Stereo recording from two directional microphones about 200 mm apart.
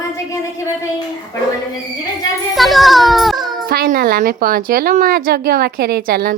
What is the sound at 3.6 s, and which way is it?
A woman's voice, 50° right (ahead or behind).